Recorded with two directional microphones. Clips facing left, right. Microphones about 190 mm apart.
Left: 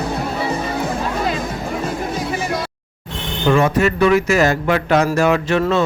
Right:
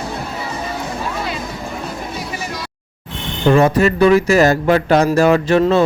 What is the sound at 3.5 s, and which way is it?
Speech, 35° right (ahead or behind).